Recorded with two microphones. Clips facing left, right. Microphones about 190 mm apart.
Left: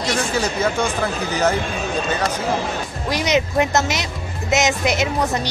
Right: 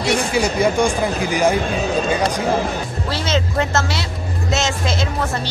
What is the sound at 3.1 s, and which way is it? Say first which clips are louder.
Speech: left 3 dB; 15° left (ahead or behind).